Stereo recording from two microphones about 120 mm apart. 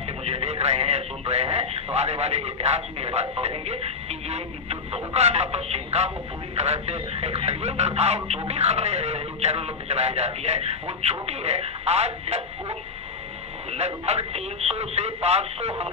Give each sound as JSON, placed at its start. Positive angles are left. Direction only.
{"t": 0.2, "sound": "speech", "side_deg": -60}